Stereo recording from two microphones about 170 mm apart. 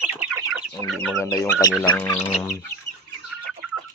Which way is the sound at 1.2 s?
20° left (ahead or behind).